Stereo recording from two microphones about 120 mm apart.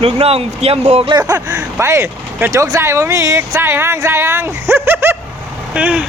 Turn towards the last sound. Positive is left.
turn(degrees=-10)  # may be behind; listen again after turning